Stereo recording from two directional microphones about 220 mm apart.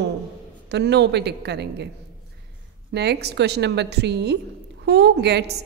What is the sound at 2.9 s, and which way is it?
A woman's voice, 50° right (ahead or behind).